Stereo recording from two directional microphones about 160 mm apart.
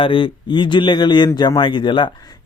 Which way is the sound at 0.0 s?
30° left (ahead or behind).